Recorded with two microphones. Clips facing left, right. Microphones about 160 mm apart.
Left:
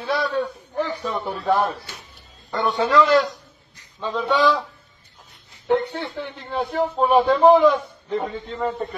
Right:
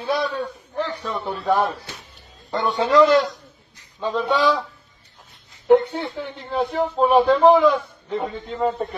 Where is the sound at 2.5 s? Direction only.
20° right (ahead or behind).